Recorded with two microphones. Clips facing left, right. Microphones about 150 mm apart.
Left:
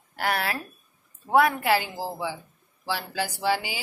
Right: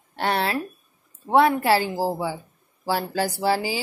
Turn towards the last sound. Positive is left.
turn(degrees=-35)  # may be behind; listen again after turning